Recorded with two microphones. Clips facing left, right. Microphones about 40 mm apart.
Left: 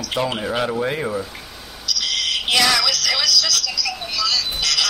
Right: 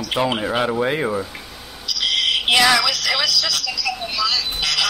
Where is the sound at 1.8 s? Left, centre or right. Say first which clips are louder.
Right 3 dB; centre.